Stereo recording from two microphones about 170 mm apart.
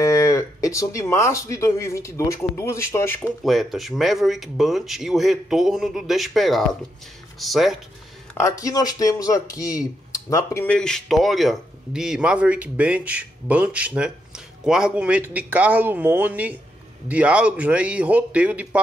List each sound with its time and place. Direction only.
0.0 s speech: 20° left (ahead or behind)
3.4 s speech: centre (ahead or behind)
8.4 s a man's voice: 20° left (ahead or behind); by 18.8 s 10° right (ahead or behind)